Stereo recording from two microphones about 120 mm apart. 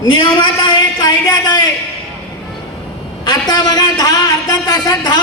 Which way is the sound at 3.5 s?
35° left (ahead or behind).